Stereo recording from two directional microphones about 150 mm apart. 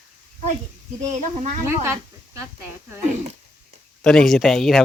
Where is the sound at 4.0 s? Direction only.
5° left (ahead or behind).